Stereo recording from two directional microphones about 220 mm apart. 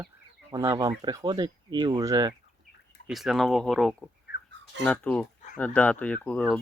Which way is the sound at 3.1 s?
Centre (ahead or behind).